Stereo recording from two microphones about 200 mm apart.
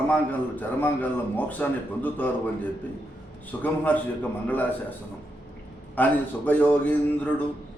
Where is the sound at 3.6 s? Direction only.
10° left (ahead or behind).